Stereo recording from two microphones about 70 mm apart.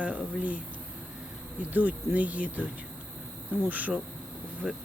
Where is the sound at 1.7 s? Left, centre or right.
Right.